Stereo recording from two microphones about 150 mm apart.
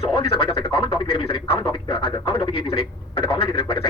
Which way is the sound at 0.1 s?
35° left (ahead or behind).